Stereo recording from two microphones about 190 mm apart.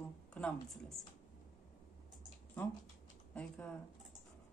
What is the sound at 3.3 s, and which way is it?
Speech, 5° left (ahead or behind).